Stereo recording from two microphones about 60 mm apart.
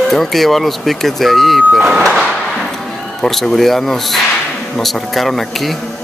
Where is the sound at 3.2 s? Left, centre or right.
Centre.